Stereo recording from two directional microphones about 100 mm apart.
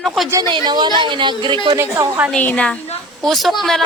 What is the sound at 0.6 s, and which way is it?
Speech, 45° right (ahead or behind).